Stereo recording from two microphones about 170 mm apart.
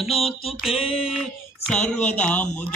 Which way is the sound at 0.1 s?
35° left (ahead or behind).